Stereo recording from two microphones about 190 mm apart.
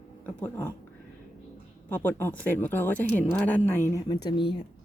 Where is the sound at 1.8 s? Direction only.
10° left (ahead or behind); by 4.6 s 25° left (ahead or behind).